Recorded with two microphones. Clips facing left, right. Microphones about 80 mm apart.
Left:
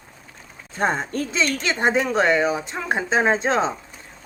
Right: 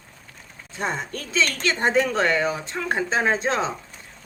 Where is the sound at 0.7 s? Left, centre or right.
Left.